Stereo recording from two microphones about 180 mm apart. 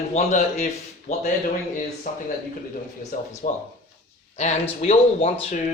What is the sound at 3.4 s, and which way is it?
Speech, 50° left (ahead or behind).